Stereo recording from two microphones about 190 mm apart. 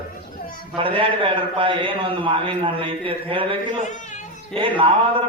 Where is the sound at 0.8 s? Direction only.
30° right (ahead or behind).